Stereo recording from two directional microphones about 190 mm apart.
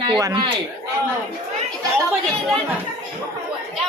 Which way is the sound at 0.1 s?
25° right (ahead or behind).